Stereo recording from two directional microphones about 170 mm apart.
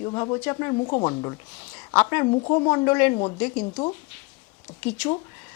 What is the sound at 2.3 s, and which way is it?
Speech, 30° left (ahead or behind).